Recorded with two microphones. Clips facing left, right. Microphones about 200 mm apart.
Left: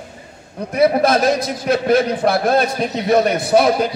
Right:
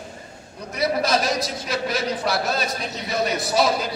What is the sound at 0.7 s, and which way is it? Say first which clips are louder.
A man's voice: left 8 dB; 55° left (ahead or behind).